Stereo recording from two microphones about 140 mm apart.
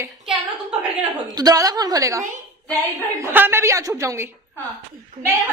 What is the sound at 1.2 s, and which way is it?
A woman's voice, 25° right (ahead or behind).